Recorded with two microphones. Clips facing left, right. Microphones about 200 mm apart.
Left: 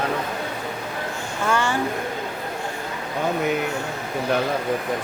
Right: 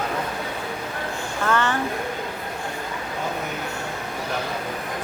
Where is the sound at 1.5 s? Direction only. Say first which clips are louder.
Even; 10° left (ahead or behind).